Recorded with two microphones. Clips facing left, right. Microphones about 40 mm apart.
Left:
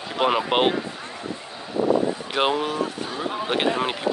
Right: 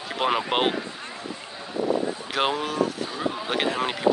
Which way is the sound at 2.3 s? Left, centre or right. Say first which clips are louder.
Left 1 dB; centre.